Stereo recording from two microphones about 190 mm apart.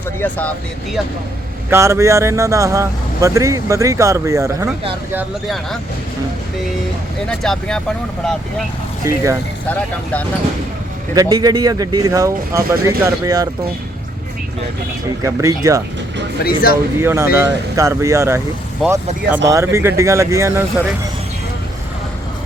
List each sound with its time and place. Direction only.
0.2 s speech: 10° left (ahead or behind)
1.7 s speech: 15° right (ahead or behind)
7.3 s speech: 5° left (ahead or behind)
9.0 s speech: 15° right (ahead or behind)
9.6 s speech: 10° left (ahead or behind)
11.1 s speech: 20° right (ahead or behind)
15.2 s speech: 15° right (ahead or behind)
16.4 s speech: 50° left (ahead or behind)
17.0 s speech: 10° right (ahead or behind)
18.8 s speech: centre (ahead or behind)
19.5 s speech: 15° right (ahead or behind)